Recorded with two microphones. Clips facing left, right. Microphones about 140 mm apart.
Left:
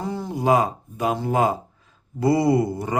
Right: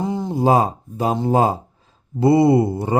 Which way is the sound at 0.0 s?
20° right (ahead or behind).